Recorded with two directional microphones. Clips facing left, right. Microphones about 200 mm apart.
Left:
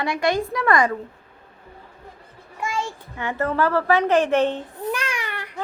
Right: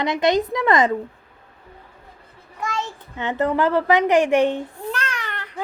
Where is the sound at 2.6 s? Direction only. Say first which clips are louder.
Even; 10° left (ahead or behind).